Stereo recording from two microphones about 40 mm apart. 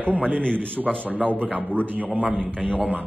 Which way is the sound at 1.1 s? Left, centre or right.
Right.